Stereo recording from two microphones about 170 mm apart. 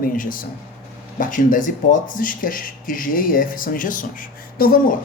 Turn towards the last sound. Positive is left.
turn(degrees=60)  # may be behind; listen again after turning